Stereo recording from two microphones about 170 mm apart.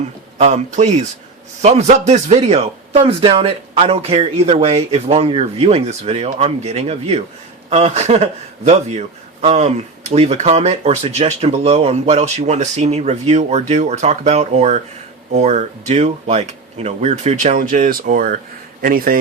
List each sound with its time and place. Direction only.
0.3 s a man's voice: 40° right (ahead or behind); by 19.2 s 60° right (ahead or behind)